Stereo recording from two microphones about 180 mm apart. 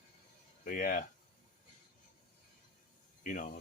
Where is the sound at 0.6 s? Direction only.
50° left (ahead or behind).